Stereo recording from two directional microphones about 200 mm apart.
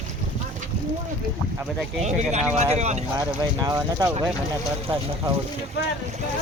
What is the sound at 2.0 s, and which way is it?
Speech, 35° right (ahead or behind).